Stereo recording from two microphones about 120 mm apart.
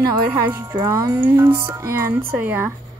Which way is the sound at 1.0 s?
15° right (ahead or behind).